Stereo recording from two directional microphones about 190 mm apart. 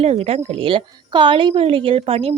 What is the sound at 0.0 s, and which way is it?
Speech, 30° right (ahead or behind).